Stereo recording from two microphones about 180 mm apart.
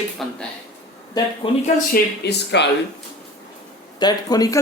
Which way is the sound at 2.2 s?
75° left (ahead or behind).